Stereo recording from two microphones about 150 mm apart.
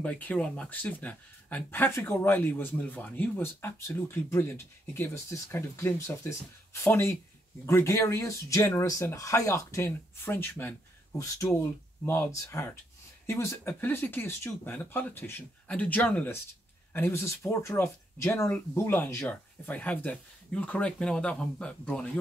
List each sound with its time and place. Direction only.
0.0 s speech: 5° left (ahead or behind)
11.1 s speech: 20° left (ahead or behind)